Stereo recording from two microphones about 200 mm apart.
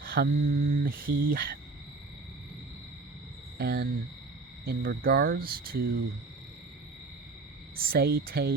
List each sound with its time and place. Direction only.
0.0 s mantra: 50° right (ahead or behind)
0.4 s speech: 45° right (ahead or behind)
3.6 s speech: 55° right (ahead or behind)
7.8 s speech: 50° right (ahead or behind)